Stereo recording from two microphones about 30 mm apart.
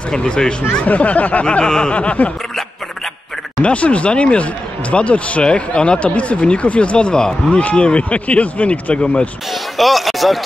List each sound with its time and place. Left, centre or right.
0.2 s speech: left
0.8 s speech: left
1.4 s speech: left
1.7 s a sound: left
2.2 s snicker: left
3.6 s speech: left
5.4 s speech: left
6.1 s speech: left
8.9 s speech: left
9.5 s speech: centre